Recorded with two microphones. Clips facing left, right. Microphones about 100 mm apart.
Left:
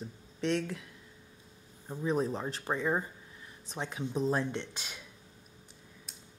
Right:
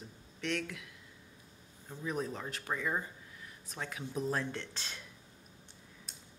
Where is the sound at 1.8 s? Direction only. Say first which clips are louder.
Left 6 dB; 30° left (ahead or behind).